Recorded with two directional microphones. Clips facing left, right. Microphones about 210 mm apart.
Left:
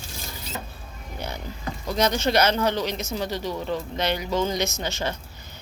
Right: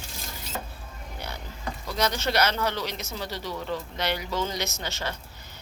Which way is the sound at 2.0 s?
20° left (ahead or behind).